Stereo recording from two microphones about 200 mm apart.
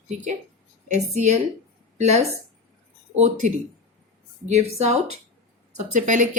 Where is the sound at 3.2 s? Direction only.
35° right (ahead or behind).